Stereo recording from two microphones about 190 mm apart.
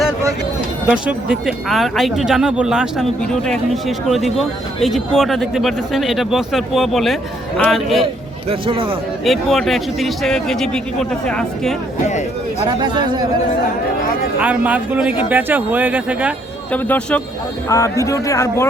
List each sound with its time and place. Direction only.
0.9 s speech: 5° right (ahead or behind)
8.4 s speech: 30° right (ahead or behind)
9.2 s speech: centre (ahead or behind)
12.0 s speech: 35° left (ahead or behind)
12.8 s speech: 25° right (ahead or behind)
14.3 s speech: 5° right (ahead or behind)
16.7 s speech: 10° left (ahead or behind)